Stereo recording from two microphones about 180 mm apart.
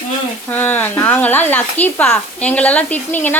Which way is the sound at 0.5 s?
10° left (ahead or behind).